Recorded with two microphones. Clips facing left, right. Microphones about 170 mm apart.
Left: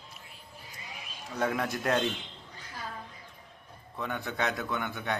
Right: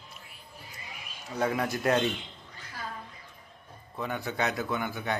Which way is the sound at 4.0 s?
Centre (ahead or behind).